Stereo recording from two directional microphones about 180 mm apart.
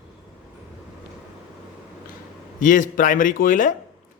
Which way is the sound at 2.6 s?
45° left (ahead or behind).